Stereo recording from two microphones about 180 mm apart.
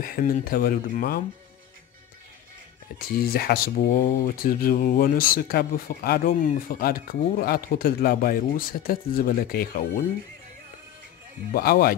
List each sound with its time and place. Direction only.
0.0 s speech: 50° left (ahead or behind)
3.0 s speech: 55° left (ahead or behind)
11.5 s speech: 55° left (ahead or behind)